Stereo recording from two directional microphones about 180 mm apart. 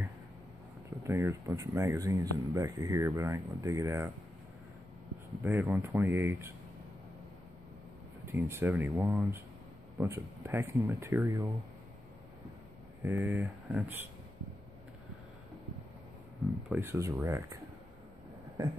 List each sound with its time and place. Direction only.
0.8 s speech: 15° right (ahead or behind)
5.4 s speech: 10° right (ahead or behind)
8.3 s speech: 15° right (ahead or behind)
13.0 s speech: 10° right (ahead or behind)
16.6 s speech: 10° right (ahead or behind)